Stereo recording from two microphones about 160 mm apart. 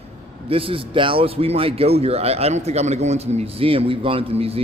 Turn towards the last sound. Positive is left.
turn(degrees=-40)  # may be behind; listen again after turning